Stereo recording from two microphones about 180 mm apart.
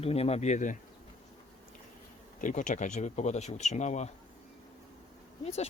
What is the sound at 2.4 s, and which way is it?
Speech, 45° left (ahead or behind).